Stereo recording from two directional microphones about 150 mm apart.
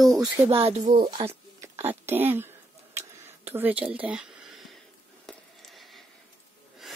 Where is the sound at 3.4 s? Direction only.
15° right (ahead or behind).